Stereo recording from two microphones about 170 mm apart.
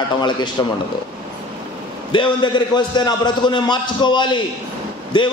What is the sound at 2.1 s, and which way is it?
A man's voice, 30° left (ahead or behind).